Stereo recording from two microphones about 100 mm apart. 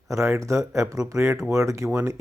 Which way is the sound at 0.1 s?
30° right (ahead or behind).